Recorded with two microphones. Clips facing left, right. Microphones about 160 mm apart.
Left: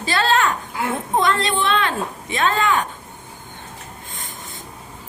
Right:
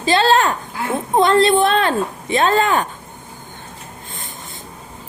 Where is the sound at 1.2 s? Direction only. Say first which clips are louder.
Right 10 dB; 30° right (ahead or behind).